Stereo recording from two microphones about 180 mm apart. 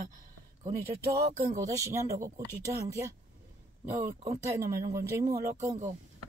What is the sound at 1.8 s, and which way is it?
Speech, 15° right (ahead or behind).